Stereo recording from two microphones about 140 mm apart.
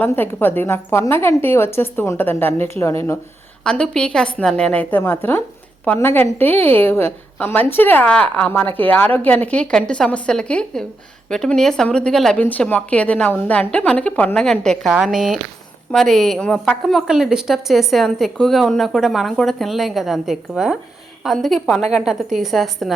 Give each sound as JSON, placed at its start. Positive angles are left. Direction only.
{"t": 0.0, "sound": "speech", "side_deg": 15}
{"t": 3.6, "sound": "a woman's voice", "side_deg": 5}